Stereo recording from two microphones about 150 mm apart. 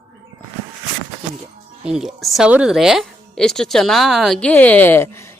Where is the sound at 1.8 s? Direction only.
5° right (ahead or behind).